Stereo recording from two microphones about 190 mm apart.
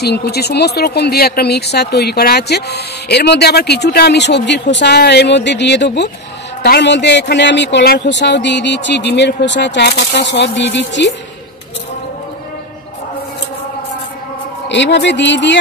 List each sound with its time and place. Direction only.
0.0 s a man's voice: 60° left (ahead or behind)
14.7 s a man's voice: 65° left (ahead or behind)